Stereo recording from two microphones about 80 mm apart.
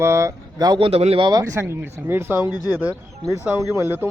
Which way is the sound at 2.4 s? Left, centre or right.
Left.